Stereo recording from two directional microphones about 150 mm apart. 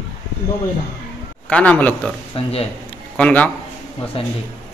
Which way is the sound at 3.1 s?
10° left (ahead or behind).